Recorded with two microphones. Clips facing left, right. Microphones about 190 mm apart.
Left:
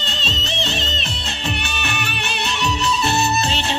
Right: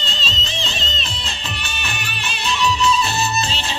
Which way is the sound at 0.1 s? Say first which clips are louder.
Left 2 dB; 65° left (ahead or behind).